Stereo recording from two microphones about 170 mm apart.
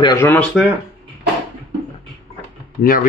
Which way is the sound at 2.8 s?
55° left (ahead or behind).